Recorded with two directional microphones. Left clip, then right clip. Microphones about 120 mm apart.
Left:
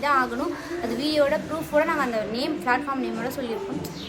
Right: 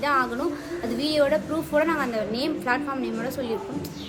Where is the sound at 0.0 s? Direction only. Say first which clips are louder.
Left 1 dB; 25° right (ahead or behind).